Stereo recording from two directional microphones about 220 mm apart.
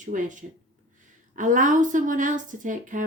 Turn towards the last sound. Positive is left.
turn(degrees=-35)  # may be behind; listen again after turning